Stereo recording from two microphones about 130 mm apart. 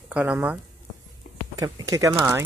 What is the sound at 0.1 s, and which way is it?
Speech, 10° right (ahead or behind).